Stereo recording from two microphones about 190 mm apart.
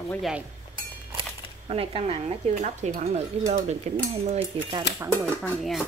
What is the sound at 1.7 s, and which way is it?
Speech, 30° right (ahead or behind).